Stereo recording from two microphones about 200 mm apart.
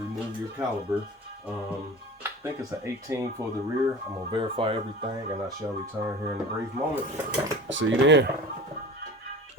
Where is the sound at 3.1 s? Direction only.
15° right (ahead or behind).